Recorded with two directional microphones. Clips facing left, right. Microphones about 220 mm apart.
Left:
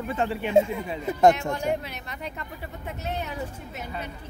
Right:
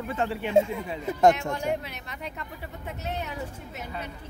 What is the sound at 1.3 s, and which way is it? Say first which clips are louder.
Speech: left 1 dB; 35° left (ahead or behind).